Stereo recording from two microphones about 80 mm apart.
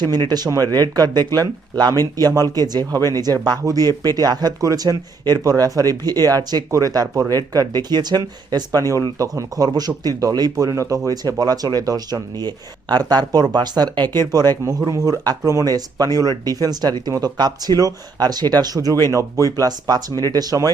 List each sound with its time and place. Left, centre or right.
0.1 s speech: right
9.1 s speech: right
14.6 s speech: right